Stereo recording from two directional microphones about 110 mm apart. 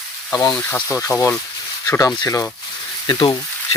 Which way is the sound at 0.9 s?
30° left (ahead or behind).